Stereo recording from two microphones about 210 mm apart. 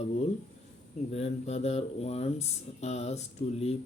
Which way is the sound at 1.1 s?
30° left (ahead or behind).